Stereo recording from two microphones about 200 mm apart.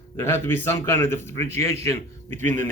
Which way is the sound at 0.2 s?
10° left (ahead or behind).